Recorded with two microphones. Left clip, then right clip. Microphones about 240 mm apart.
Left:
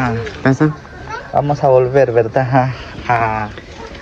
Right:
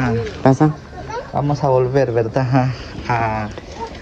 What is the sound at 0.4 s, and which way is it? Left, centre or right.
Speech, centre.